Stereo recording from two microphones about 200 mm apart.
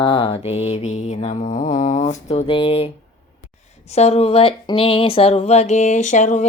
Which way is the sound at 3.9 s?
35° left (ahead or behind).